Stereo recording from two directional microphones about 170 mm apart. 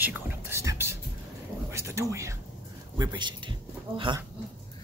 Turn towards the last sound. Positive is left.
turn(degrees=-30)  # may be behind; listen again after turning